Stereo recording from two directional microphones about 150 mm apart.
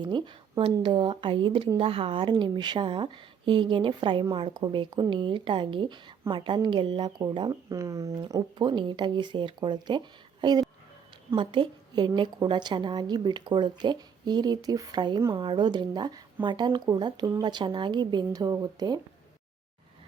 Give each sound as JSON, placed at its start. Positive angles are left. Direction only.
{"t": 0.0, "sound": "a woman's voice", "side_deg": -30}